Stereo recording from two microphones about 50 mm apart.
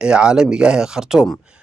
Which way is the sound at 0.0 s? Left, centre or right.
Centre.